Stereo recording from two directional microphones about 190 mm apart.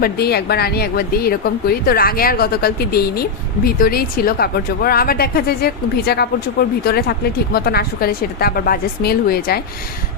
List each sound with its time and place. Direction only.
0.0 s speech: 55° left (ahead or behind)